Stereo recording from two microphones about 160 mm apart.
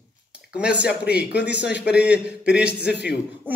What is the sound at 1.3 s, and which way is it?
Speech, 90° left.